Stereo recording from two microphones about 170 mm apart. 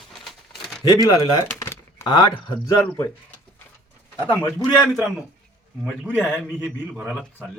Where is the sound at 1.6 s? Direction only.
15° left (ahead or behind).